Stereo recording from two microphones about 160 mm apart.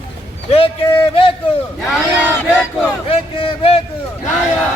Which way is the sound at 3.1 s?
35° left (ahead or behind).